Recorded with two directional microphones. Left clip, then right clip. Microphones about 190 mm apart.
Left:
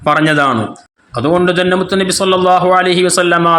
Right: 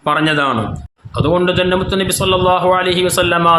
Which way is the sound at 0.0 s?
20° left (ahead or behind).